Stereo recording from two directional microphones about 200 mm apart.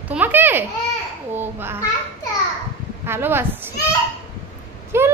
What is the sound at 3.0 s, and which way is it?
Speech, 10° right (ahead or behind).